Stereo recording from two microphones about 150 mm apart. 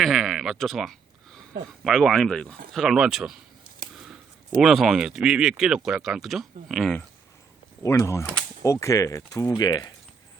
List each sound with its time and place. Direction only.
0.0 s speech: centre (ahead or behind)
4.6 s speech: 5° right (ahead or behind)
7.8 s speech: 20° left (ahead or behind)